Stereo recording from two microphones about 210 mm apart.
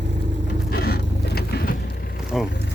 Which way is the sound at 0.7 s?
50° left (ahead or behind).